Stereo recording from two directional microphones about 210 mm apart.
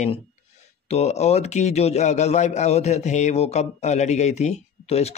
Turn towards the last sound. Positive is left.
turn(degrees=30)  # may be behind; listen again after turning